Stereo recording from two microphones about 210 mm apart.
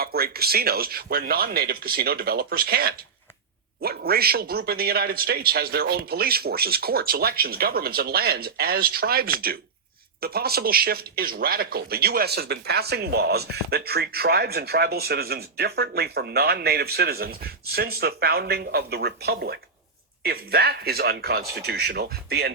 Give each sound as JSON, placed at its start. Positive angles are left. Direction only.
{"t": 0.0, "sound": "speech", "side_deg": -45}